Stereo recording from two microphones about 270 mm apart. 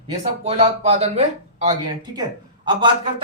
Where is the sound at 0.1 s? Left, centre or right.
Right.